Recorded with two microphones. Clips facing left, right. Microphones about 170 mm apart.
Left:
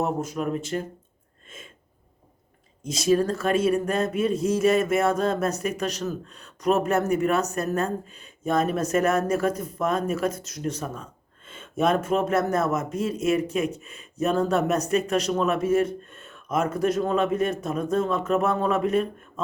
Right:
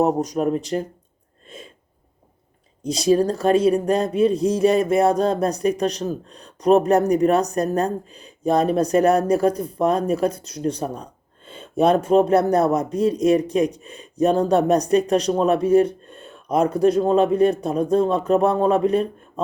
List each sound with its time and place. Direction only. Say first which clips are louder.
0.0 s speech: right 7 dB; 40° right (ahead or behind)
1.5 s a sound: right 6 dB; 35° right (ahead or behind)
2.8 s speech: right 4 dB; 35° right (ahead or behind)